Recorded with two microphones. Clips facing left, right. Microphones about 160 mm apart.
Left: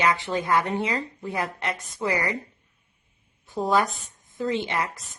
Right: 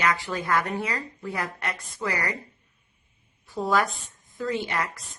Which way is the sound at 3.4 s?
20° left (ahead or behind).